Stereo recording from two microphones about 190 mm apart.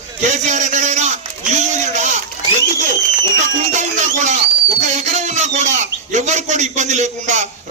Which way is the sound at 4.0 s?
40° right (ahead or behind).